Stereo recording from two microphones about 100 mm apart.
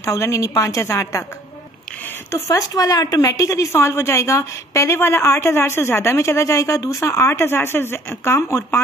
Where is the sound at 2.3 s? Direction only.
35° left (ahead or behind).